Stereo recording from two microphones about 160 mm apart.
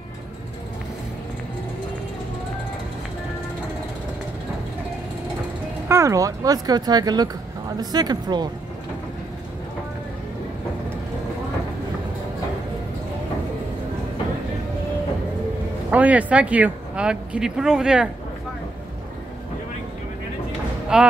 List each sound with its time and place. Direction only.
5.9 s speech: 20° right (ahead or behind)
15.9 s speech: 10° right (ahead or behind)
20.9 s speech: 5° right (ahead or behind)